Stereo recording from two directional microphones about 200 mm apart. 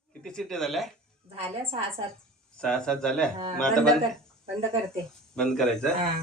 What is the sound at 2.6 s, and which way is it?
Speech, 5° left (ahead or behind).